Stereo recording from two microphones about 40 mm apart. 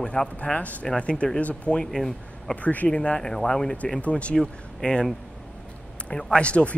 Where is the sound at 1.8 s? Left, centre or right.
Centre.